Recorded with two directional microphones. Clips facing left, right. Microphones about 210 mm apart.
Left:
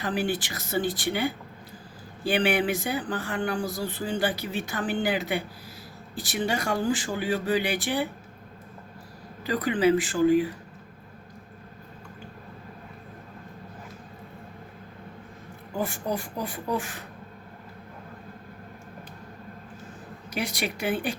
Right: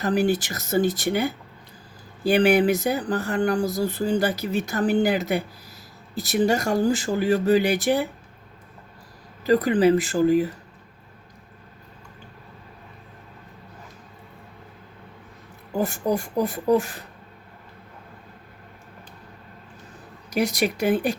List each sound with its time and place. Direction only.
0.0 s speech: 40° right (ahead or behind)
9.4 s speech: 40° right (ahead or behind)
15.8 s speech: 45° right (ahead or behind)
20.3 s speech: 40° right (ahead or behind)